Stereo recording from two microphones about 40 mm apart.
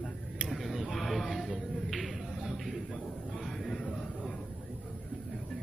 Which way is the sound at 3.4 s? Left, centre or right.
Centre.